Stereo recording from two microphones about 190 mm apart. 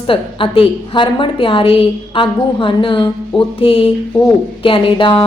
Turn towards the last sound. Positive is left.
turn(degrees=25)  # may be behind; listen again after turning